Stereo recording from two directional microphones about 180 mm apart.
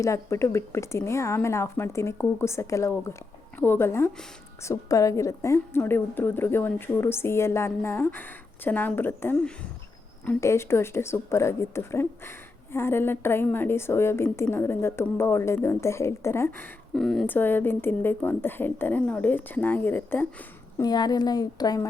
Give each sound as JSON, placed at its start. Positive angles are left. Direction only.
{"t": 0.0, "sound": "a woman's voice", "side_deg": 15}
{"t": 20.7, "sound": "a woman's voice", "side_deg": 20}